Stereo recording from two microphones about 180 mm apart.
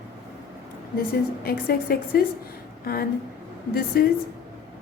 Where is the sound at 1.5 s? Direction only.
60° left (ahead or behind).